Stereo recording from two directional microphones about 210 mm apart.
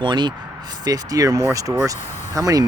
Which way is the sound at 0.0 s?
20° right (ahead or behind).